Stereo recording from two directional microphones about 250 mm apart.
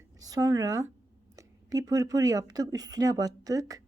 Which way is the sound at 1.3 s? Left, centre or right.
Centre.